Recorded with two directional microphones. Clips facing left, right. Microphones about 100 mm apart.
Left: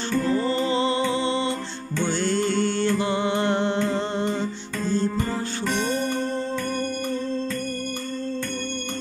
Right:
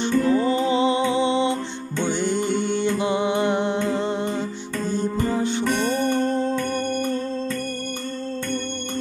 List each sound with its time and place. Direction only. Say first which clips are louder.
0.0 s music: right 4 dB; 15° right (ahead or behind)
5.0 s music: right 3 dB; 15° right (ahead or behind)